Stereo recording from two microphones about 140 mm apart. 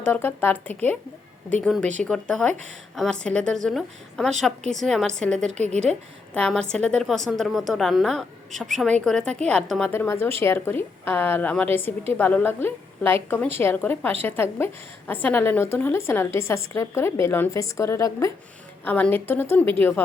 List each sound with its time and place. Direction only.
0.0 s a woman's voice: 15° left (ahead or behind)
5.5 s speech: 55° right (ahead or behind)
5.8 s a woman's voice: 5° left (ahead or behind)
9.9 s a woman's voice: 15° left (ahead or behind)